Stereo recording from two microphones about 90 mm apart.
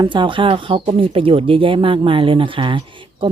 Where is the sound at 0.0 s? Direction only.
60° right (ahead or behind).